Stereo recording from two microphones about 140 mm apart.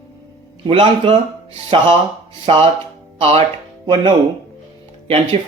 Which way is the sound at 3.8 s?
35° right (ahead or behind).